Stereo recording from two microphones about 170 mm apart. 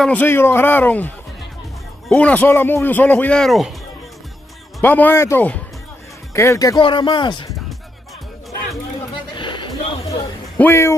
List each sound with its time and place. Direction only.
0.0 s a man's voice: 10° left (ahead or behind)
4.8 s a man's voice: 10° left (ahead or behind); by 7.5 s 25° left (ahead or behind)
9.3 s a sound: 30° left (ahead or behind)
10.6 s a man's voice: 15° left (ahead or behind)